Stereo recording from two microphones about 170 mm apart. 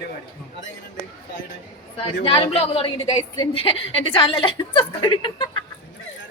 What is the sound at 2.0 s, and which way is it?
A woman's voice, 30° left (ahead or behind).